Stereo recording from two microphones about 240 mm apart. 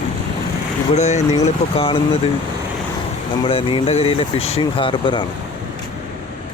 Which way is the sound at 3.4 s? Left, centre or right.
Left.